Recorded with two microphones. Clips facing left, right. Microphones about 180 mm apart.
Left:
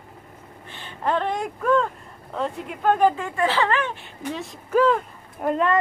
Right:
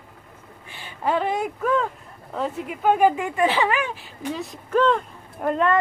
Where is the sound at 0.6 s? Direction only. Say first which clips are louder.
Even; 10° right (ahead or behind).